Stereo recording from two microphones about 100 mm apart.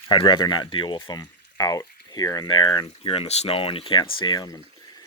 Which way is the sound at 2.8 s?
65° left (ahead or behind).